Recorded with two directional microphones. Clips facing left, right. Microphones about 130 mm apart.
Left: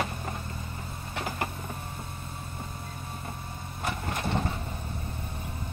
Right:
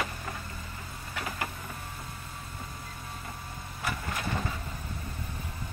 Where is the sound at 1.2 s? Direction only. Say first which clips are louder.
Left 3 dB; 30° left (ahead or behind).